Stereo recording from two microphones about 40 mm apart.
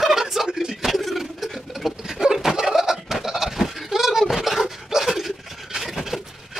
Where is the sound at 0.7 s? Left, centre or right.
Centre.